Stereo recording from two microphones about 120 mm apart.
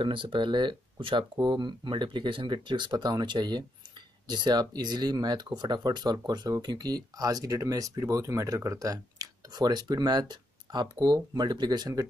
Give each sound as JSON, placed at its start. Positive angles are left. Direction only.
{"t": 0.0, "sound": "speech", "side_deg": -45}